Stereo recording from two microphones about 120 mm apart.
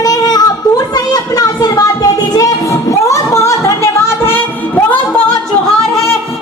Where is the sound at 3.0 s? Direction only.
25° left (ahead or behind).